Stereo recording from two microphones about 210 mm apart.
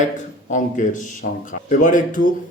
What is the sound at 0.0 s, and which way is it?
A man's voice, 35° left (ahead or behind).